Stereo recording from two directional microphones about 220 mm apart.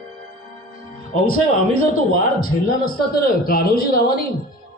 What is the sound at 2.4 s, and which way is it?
A woman's voice, 40° left (ahead or behind).